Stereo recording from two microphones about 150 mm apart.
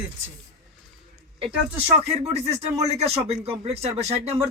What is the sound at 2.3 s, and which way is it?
Speech, 45° right (ahead or behind).